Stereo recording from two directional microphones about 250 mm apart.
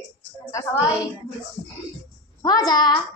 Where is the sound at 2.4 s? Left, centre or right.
Centre.